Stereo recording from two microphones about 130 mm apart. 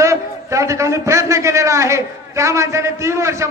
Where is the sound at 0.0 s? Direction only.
25° right (ahead or behind).